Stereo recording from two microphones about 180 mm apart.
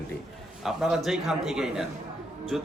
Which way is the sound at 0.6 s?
Centre (ahead or behind).